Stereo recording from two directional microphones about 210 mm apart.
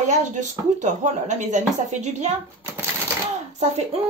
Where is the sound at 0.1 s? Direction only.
35° right (ahead or behind).